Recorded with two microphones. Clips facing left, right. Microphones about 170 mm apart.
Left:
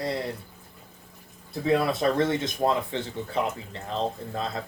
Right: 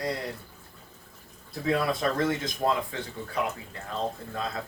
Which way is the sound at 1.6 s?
25° left (ahead or behind).